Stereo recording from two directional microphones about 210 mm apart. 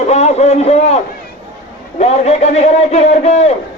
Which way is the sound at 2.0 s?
30° left (ahead or behind).